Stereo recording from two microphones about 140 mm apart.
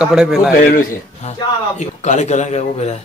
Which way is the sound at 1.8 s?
55° left (ahead or behind).